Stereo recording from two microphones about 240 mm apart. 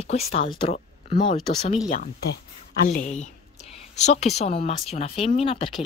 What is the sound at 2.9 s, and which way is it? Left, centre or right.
Speech, left.